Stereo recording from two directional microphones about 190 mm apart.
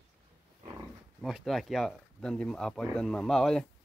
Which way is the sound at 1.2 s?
Centre (ahead or behind).